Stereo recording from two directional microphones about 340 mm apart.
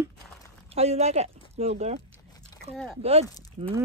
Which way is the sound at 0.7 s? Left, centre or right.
Centre.